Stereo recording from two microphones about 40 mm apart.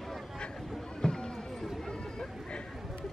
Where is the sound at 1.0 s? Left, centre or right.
Centre.